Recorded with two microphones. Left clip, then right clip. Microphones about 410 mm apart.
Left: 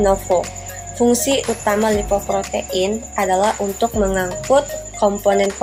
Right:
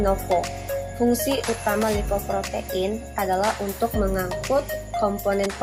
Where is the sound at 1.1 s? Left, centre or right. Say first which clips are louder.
Left 6 dB; right.